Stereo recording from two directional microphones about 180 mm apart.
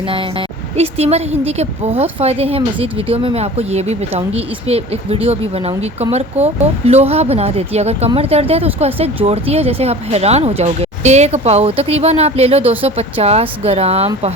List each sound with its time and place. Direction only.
0.1 s speech: 30° right (ahead or behind)